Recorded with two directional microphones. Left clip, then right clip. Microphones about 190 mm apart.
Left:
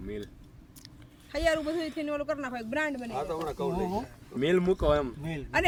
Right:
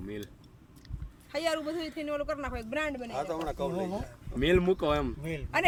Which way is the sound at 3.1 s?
70° right (ahead or behind).